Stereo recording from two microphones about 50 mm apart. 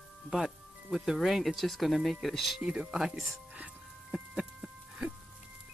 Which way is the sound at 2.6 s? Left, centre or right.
Centre.